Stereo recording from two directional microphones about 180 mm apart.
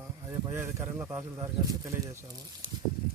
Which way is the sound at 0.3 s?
15° right (ahead or behind).